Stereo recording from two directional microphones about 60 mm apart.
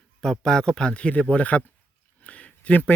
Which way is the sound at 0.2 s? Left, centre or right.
Centre.